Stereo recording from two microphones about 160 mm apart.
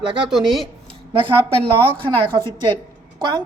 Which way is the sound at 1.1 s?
30° right (ahead or behind).